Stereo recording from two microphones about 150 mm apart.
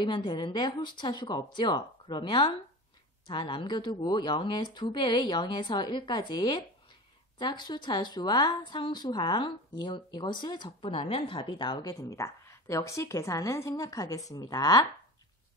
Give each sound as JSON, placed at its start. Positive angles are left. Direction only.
{"t": 0.0, "sound": "a woman's voice", "side_deg": 30}